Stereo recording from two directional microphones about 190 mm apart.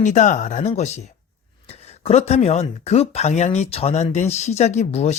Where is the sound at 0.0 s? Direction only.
40° left (ahead or behind).